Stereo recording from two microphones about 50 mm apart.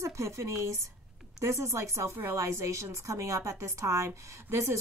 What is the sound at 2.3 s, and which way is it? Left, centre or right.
A woman's voice, right.